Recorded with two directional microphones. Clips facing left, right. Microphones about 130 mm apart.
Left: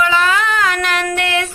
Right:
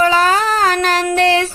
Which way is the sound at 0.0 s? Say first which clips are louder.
Right 3 dB; 40° right (ahead or behind).